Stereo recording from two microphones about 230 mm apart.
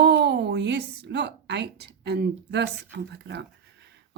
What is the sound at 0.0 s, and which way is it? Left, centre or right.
A woman's voice, right.